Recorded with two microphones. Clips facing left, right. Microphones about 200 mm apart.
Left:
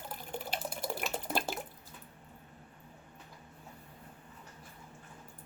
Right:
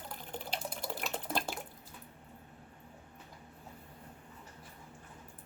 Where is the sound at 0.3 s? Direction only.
10° left (ahead or behind).